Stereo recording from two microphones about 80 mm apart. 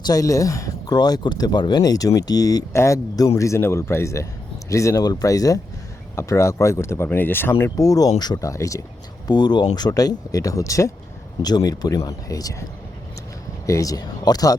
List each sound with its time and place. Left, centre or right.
0.0 s speech: left
0.9 s speech: left
2.7 s a man's voice: left
7.8 s speech: left
8.4 s speech: left
9.2 s speech: left
11.4 s speech: left
13.7 s speech: left